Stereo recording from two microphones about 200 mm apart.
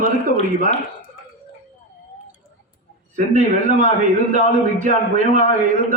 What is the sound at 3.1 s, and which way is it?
Speech, 40° right (ahead or behind).